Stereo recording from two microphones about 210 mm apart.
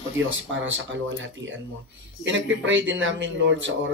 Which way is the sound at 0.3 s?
65° right (ahead or behind).